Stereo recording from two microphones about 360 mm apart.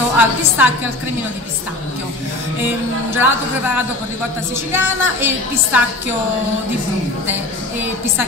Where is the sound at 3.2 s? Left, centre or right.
Centre.